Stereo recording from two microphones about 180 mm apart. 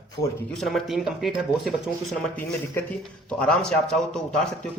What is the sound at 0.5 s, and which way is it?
Speech, centre (ahead or behind).